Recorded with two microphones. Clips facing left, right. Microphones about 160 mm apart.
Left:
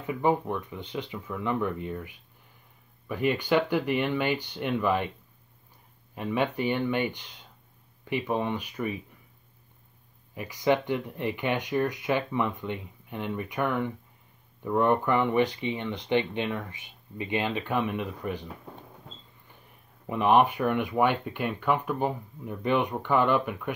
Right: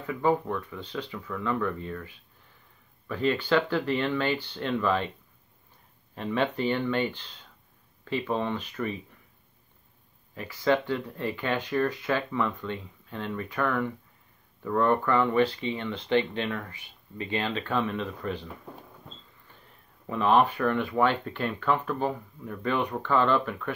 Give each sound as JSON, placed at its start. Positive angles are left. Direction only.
{"t": 0.0, "sound": "speech", "side_deg": 20}
{"t": 6.1, "sound": "speech", "side_deg": 10}
{"t": 10.3, "sound": "speech", "side_deg": 15}
{"t": 19.5, "sound": "speech", "side_deg": 15}